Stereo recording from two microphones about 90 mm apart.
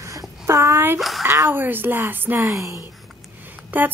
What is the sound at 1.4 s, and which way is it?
Speech, 20° right (ahead or behind).